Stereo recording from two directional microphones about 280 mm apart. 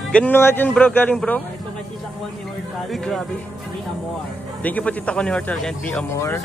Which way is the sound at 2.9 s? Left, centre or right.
Centre.